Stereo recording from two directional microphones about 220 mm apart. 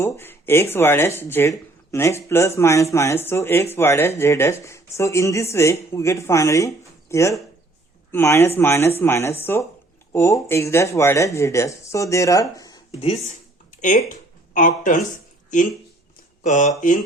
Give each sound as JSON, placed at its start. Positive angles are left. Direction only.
{"t": 0.0, "sound": "speech", "side_deg": 10}
{"t": 12.9, "sound": "a woman's voice", "side_deg": 30}
{"t": 14.1, "sound": "a sound", "side_deg": 35}
{"t": 16.4, "sound": "speech", "side_deg": 35}